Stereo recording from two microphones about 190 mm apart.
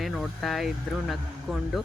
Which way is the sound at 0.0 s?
Centre (ahead or behind).